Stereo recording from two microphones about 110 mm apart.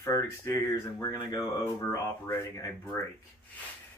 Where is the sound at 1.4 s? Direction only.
30° left (ahead or behind).